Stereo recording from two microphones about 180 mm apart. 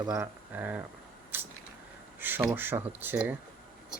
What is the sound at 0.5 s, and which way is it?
Speech, 10° right (ahead or behind).